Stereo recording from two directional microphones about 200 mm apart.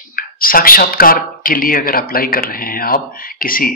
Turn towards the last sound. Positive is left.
turn(degrees=45)  # may be behind; listen again after turning